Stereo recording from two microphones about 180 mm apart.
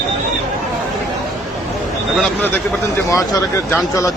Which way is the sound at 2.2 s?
10° left (ahead or behind).